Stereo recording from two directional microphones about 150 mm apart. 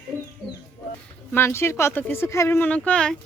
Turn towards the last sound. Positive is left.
turn(degrees=10)  # may be behind; listen again after turning